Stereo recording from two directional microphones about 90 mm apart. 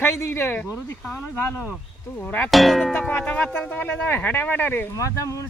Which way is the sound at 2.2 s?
20° left (ahead or behind).